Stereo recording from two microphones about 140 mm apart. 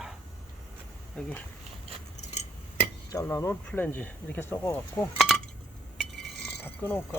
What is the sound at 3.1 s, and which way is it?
Speech, 20° left (ahead or behind).